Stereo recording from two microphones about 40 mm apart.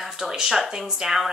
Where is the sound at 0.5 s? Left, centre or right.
Centre.